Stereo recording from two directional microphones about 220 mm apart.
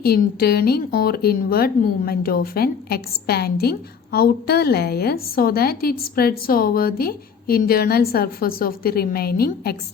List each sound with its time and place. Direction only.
0.0 s a woman's voice: 45° left (ahead or behind)